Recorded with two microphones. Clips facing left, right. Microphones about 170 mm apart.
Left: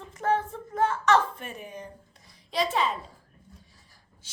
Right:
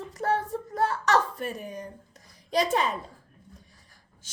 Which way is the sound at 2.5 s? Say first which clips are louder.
Right 2 dB; 45° right (ahead or behind).